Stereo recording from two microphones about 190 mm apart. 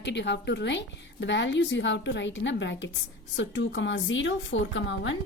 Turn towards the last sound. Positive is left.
turn(degrees=70)  # may be behind; listen again after turning